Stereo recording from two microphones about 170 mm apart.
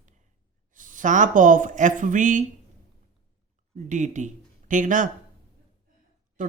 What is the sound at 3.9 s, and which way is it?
Speech, 45° right (ahead or behind).